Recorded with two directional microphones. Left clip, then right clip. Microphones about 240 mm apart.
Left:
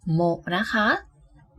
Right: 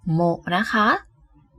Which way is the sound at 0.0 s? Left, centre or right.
Centre.